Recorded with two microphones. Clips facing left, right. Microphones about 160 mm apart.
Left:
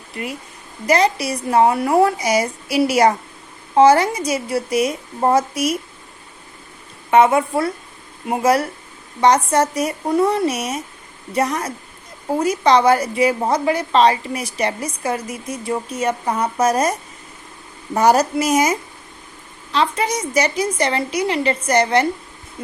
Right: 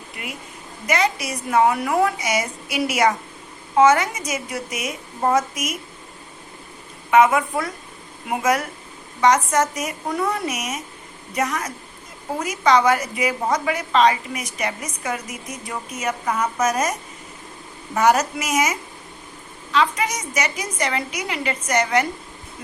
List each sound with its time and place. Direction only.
0.9 s a woman's voice: 35° left (ahead or behind)
7.1 s a woman's voice: 30° left (ahead or behind)